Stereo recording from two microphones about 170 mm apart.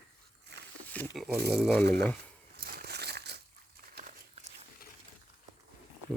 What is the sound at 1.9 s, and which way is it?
Speech, 10° left (ahead or behind).